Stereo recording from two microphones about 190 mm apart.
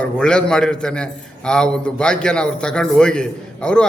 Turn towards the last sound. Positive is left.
turn(degrees=5)  # may be behind; listen again after turning